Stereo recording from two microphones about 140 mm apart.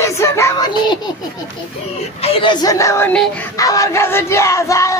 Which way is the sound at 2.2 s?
35° left (ahead or behind).